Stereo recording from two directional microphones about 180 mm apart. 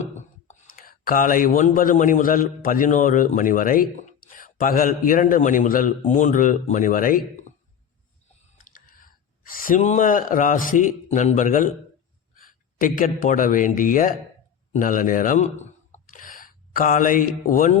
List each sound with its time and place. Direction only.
0.0 s speech: 40° left (ahead or behind)
8.5 s speech: 50° left (ahead or behind)